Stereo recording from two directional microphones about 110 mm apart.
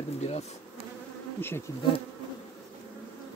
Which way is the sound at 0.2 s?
85° left.